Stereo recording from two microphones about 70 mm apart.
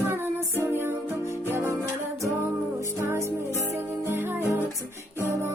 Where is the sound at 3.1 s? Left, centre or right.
Right.